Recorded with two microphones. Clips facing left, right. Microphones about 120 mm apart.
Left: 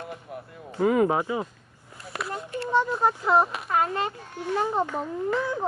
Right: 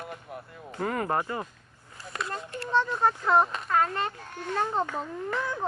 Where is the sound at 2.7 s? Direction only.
10° left (ahead or behind).